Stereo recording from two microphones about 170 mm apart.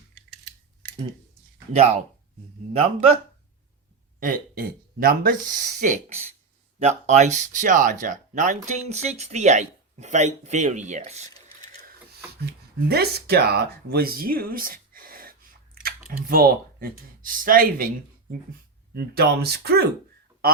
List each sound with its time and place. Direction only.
0.8 s a sound: 10° left (ahead or behind)
1.7 s speech: 40° right (ahead or behind)
4.2 s speech: 60° right (ahead or behind)
5.8 s speech: 45° right (ahead or behind)
12.9 s speech: 70° right (ahead or behind)
18.9 s speech: 65° right (ahead or behind)